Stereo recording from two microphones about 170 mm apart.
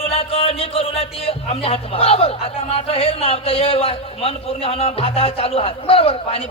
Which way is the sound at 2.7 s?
35° left (ahead or behind).